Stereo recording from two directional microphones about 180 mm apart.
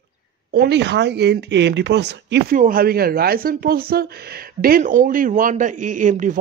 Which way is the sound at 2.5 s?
50° right (ahead or behind).